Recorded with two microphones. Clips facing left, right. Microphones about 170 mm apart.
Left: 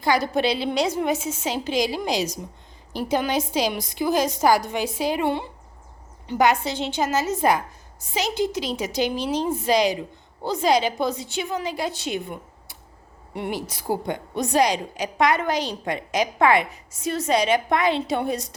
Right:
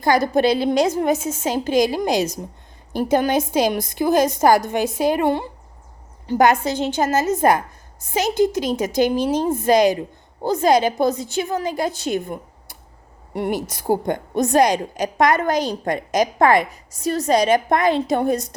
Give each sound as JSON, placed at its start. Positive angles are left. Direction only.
{"t": 0.0, "sound": "a woman's voice", "side_deg": -45}